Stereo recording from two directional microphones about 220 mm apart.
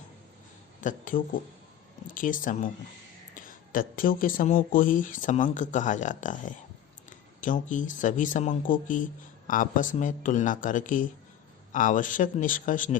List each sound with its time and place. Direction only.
0.8 s speech: 35° left (ahead or behind)